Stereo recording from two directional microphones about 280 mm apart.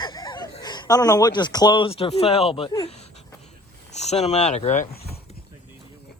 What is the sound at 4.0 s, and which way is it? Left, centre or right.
Speech, left.